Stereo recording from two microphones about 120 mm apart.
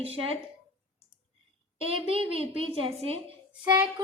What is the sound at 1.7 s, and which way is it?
A woman's voice, 50° right (ahead or behind).